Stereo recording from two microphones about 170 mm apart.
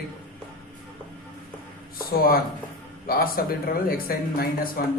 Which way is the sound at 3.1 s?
60° left (ahead or behind).